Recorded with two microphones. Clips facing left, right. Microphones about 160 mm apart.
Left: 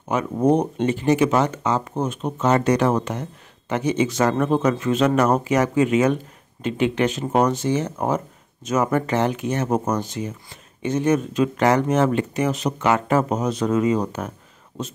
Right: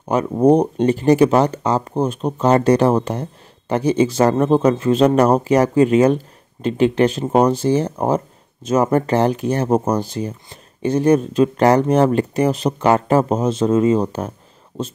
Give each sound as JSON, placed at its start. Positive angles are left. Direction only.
{"t": 0.1, "sound": "speech", "side_deg": -35}